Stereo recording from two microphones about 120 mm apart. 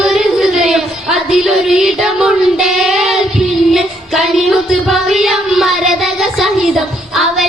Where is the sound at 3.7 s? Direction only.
Centre (ahead or behind).